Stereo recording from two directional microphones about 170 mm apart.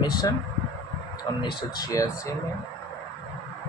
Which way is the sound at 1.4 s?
20° left (ahead or behind).